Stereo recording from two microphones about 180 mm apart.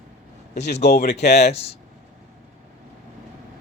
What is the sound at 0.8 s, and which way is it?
Speech, 60° left (ahead or behind).